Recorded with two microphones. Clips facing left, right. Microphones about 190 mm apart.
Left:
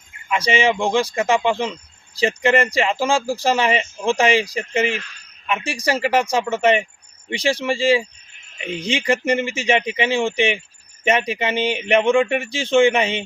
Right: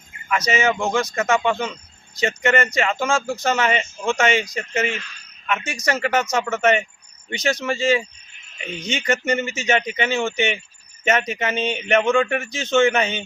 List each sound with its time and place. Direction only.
0.3 s speech: 30° left (ahead or behind)